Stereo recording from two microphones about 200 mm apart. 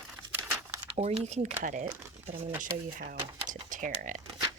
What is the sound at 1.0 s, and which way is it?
Speech, 35° right (ahead or behind).